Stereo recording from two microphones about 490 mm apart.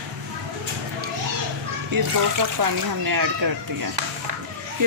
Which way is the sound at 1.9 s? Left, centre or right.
Right.